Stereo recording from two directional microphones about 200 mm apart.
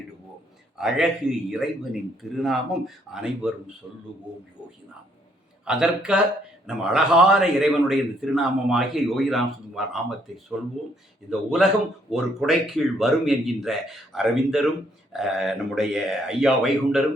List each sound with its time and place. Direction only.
0.8 s a man's voice: centre (ahead or behind)
5.6 s a man's voice: 5° right (ahead or behind)